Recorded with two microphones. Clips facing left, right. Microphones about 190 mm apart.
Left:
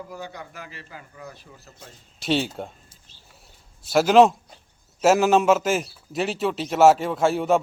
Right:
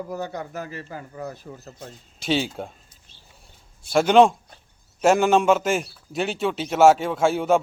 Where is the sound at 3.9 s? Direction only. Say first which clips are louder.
Even; centre (ahead or behind).